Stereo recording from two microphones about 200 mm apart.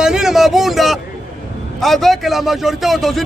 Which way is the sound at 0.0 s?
5° right (ahead or behind).